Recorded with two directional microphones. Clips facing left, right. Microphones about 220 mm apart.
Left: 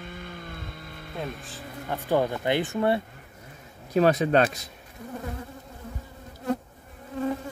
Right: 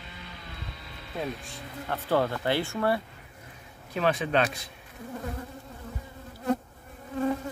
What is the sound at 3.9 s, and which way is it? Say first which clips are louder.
Speech: left 6 dB; 40° left (ahead or behind).